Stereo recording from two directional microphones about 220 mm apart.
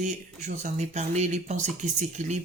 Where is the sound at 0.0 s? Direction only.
30° right (ahead or behind).